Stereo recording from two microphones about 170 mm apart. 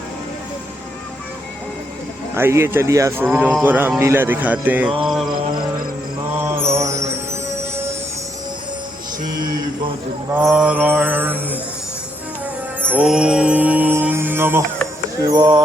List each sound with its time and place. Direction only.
2.3 s mantra: 15° right (ahead or behind)
6.4 s mantra: 15° right (ahead or behind)
9.2 s mantra: 25° right (ahead or behind)
10.4 s mantra: 5° right (ahead or behind)
12.8 s music: 10° right (ahead or behind)
15.2 s a sound: 20° right (ahead or behind)